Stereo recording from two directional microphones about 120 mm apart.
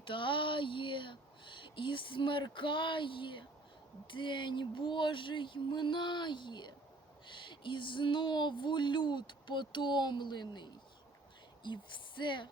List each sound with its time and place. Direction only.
0.0 s speech: 45° left (ahead or behind)